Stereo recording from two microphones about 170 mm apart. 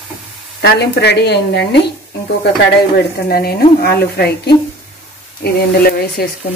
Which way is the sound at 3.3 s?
65° left (ahead or behind).